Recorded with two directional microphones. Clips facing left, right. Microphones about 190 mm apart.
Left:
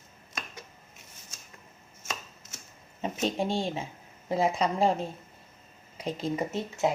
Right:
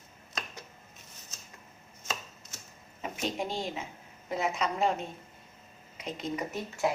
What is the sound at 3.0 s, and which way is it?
A woman's voice, 30° left (ahead or behind).